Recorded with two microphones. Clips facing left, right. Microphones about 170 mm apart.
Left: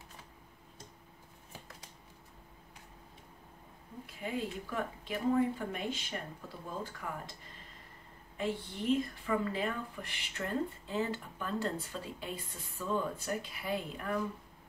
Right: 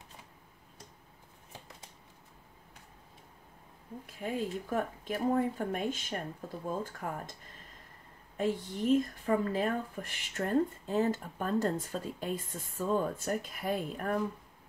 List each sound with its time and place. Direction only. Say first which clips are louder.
4.0 s speech: right 2 dB; 45° right (ahead or behind)
8.4 s speech: right 4 dB; 45° right (ahead or behind)